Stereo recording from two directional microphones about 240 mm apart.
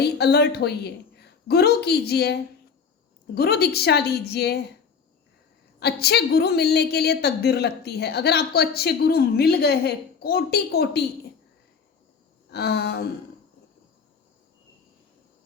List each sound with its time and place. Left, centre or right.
0.0 s a woman's voice: left
5.8 s a woman's voice: left
12.5 s a woman's voice: left